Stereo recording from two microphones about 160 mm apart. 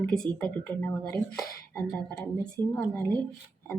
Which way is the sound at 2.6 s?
25° right (ahead or behind).